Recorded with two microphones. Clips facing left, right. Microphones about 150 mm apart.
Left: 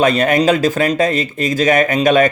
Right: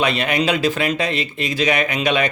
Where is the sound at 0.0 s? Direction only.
45° left (ahead or behind).